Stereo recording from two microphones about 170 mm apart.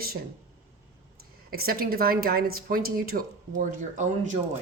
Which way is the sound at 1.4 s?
60° right (ahead or behind).